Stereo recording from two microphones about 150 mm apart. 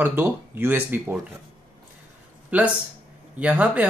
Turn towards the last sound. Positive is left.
turn(degrees=-10)  # may be behind; listen again after turning